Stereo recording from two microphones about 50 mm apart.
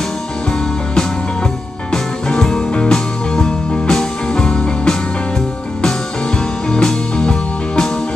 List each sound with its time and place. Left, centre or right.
1.9 s music: centre
6.7 s music: centre